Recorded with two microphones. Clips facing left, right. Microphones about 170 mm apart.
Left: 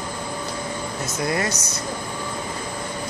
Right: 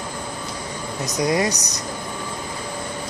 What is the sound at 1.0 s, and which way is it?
Speech, 15° right (ahead or behind).